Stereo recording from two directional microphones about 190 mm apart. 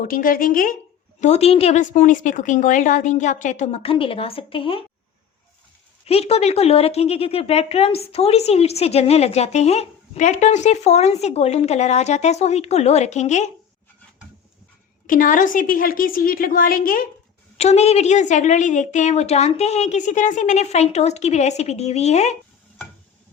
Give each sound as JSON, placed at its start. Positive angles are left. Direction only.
{"t": 0.0, "sound": "a woman's voice", "side_deg": 50}
{"t": 1.2, "sound": "speech", "side_deg": 35}
{"t": 6.1, "sound": "speech", "side_deg": 30}
{"t": 15.0, "sound": "a woman's voice", "side_deg": 45}
{"t": 17.6, "sound": "speech", "side_deg": 35}